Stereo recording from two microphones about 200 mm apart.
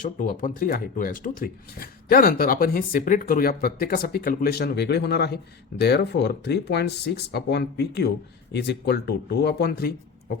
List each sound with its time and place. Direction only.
0.2 s speech: 40° left (ahead or behind)